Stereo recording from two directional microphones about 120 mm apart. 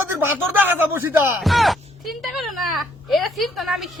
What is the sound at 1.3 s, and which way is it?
Speech, centre (ahead or behind).